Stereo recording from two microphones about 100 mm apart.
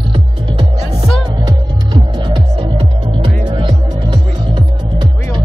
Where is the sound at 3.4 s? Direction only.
50° right (ahead or behind).